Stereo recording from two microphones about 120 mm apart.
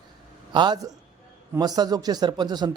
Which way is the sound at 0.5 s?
40° right (ahead or behind).